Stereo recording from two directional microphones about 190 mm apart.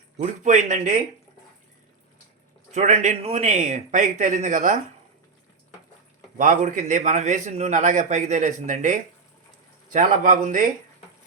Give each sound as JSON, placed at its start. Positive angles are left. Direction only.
{"t": 0.2, "sound": "speech", "side_deg": -40}
{"t": 2.7, "sound": "speech", "side_deg": -35}
{"t": 6.3, "sound": "speech", "side_deg": -45}